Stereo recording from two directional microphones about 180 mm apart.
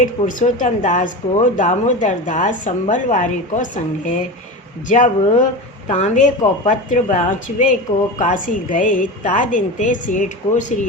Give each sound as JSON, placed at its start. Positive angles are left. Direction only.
{"t": 0.0, "sound": "a woman's voice", "side_deg": 45}